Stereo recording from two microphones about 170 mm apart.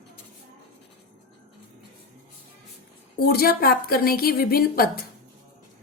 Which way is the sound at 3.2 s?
65° left (ahead or behind).